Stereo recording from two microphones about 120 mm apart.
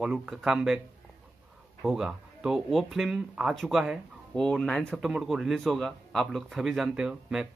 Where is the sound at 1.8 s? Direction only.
5° right (ahead or behind).